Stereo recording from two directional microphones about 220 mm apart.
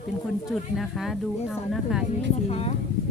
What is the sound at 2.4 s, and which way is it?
Music, 30° left (ahead or behind).